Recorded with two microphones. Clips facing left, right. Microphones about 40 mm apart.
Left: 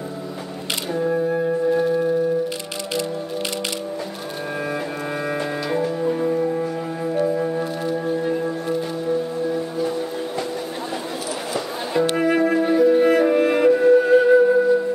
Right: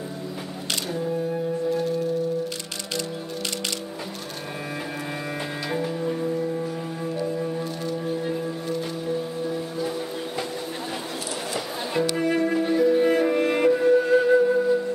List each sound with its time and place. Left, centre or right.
1.8 s singing bowl: centre
5.9 s music: centre
6.2 s music: left
7.8 s singing bowl: centre
9.5 s music: centre
12.2 s music: centre
13.2 s music: centre